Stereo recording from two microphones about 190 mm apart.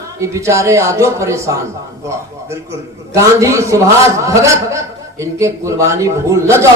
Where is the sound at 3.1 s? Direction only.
15° right (ahead or behind).